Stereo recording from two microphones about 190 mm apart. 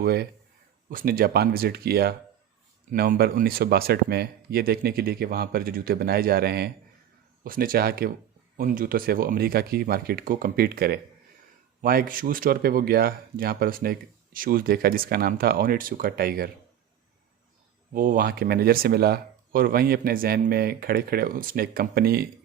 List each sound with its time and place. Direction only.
0.0 s speech: 55° right (ahead or behind)
17.9 s speech: 45° right (ahead or behind)